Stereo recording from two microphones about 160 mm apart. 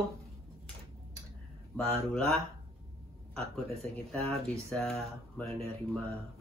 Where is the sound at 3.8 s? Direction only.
5° left (ahead or behind).